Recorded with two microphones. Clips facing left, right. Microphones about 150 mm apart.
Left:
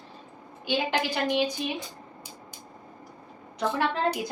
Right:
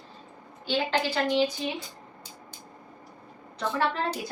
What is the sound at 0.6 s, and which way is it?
Speech, 15° left (ahead or behind).